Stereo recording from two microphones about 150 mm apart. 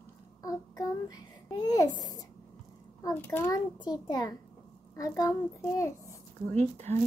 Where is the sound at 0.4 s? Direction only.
25° left (ahead or behind).